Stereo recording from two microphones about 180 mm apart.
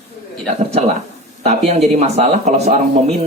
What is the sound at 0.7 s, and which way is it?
A man's voice, 35° right (ahead or behind).